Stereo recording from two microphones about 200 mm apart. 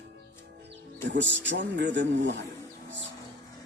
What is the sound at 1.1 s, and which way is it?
Speech, 65° right (ahead or behind).